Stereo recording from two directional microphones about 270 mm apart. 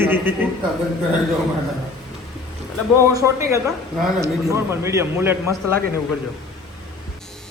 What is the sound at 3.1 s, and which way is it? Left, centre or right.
A man's voice, centre.